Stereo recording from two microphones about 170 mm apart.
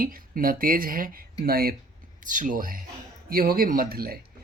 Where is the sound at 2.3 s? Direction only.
50° right (ahead or behind).